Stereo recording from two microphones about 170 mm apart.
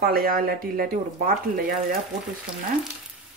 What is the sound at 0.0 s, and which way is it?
Speech, 60° right (ahead or behind).